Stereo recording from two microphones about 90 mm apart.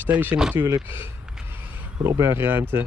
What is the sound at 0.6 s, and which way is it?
Speech, 35° right (ahead or behind).